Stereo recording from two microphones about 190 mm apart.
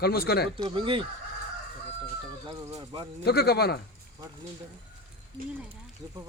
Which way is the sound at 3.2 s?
55° left (ahead or behind).